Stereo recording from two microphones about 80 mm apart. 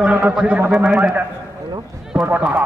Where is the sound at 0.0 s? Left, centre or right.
Centre.